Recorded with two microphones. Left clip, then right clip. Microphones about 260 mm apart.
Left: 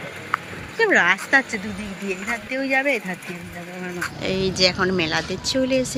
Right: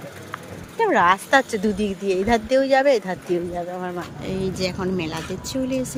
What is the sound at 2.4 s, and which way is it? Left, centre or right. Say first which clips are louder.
Speech: right 7 dB; right.